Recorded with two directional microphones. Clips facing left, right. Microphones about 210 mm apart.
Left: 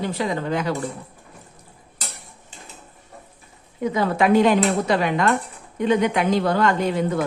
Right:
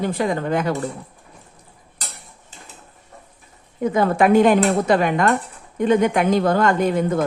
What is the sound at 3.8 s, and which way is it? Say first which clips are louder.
Speech: right 3 dB; 50° right (ahead or behind).